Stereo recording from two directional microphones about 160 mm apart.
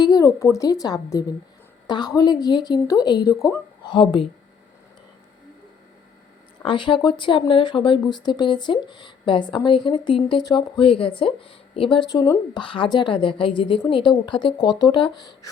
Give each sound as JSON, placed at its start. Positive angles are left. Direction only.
{"t": 0.0, "sound": "a woman's voice", "side_deg": 25}
{"t": 6.7, "sound": "a woman's voice", "side_deg": 30}